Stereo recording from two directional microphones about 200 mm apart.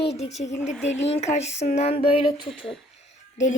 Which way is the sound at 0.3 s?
35° left (ahead or behind).